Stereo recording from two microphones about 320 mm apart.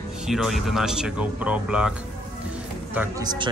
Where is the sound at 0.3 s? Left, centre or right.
Centre.